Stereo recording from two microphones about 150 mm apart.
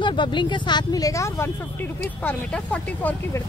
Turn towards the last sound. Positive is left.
turn(degrees=10)  # may be behind; listen again after turning